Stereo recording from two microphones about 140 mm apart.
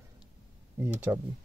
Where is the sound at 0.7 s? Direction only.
10° right (ahead or behind).